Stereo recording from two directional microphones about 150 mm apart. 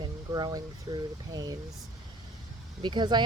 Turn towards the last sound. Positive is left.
turn(degrees=-30)  # may be behind; listen again after turning